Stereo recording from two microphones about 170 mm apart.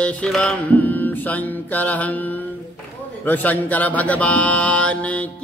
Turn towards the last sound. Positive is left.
turn(degrees=5)  # may be behind; listen again after turning